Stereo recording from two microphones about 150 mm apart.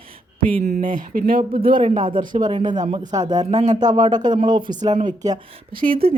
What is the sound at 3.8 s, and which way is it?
Speech, 30° right (ahead or behind).